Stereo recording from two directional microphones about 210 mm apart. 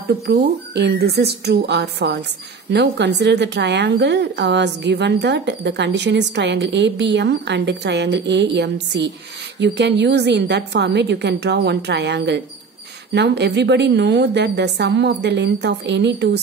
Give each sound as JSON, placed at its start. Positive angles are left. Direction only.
{"t": 0.0, "sound": "a woman's voice", "side_deg": -50}